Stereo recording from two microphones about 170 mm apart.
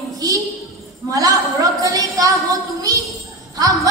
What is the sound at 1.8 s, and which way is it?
Speech, 20° right (ahead or behind).